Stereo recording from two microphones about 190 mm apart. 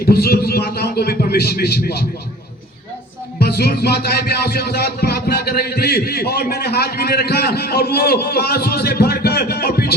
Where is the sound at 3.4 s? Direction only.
55° left (ahead or behind).